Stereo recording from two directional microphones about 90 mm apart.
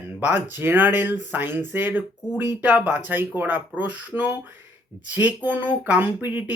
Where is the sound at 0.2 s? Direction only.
20° right (ahead or behind).